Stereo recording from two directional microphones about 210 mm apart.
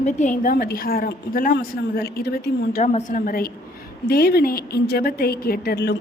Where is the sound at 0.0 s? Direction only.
35° left (ahead or behind).